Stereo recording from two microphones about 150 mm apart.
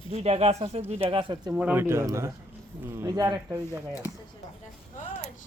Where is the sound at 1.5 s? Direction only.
10° right (ahead or behind).